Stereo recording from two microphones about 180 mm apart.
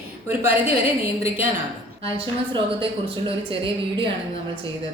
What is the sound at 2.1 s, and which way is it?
Speech, 30° right (ahead or behind).